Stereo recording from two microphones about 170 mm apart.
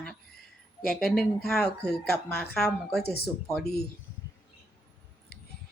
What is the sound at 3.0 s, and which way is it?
Speech, 70° left (ahead or behind).